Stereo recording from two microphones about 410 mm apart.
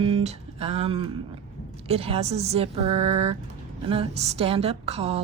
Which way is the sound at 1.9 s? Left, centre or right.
Centre.